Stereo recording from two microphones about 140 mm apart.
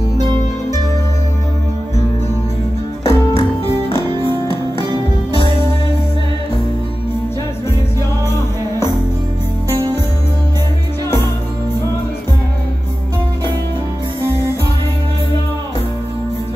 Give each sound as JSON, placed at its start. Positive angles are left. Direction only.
{"t": 3.1, "sound": "music", "side_deg": 40}
{"t": 4.2, "sound": "music", "side_deg": -35}